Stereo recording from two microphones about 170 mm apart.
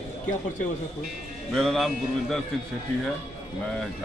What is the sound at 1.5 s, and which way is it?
Speech, centre (ahead or behind).